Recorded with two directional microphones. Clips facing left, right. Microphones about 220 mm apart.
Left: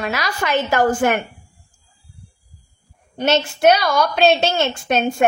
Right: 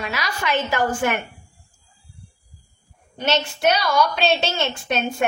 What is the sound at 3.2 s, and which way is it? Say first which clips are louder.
Speech: left 5 dB; 55° left (ahead or behind).